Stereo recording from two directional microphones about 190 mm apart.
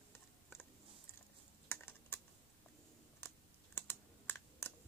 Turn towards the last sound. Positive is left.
turn(degrees=10)  # may be behind; listen again after turning